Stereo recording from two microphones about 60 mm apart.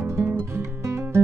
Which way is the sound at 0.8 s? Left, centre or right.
Right.